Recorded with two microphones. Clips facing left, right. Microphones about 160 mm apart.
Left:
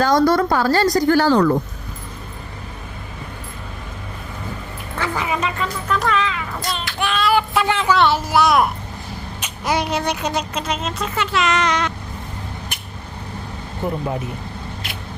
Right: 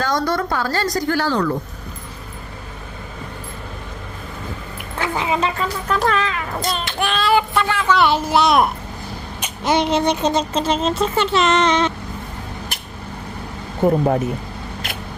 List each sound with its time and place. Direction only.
0.0 s a woman's voice: 35° left (ahead or behind)
4.9 s a sound: 20° right (ahead or behind)
5.5 s speech: 40° right (ahead or behind)
7.6 s a woman's voice: 20° left (ahead or behind)
8.0 s speech: 20° right (ahead or behind)
9.6 s speech: 25° right (ahead or behind)
13.8 s speech: 50° right (ahead or behind)